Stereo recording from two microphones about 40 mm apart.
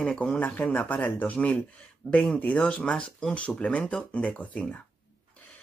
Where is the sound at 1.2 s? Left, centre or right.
Left.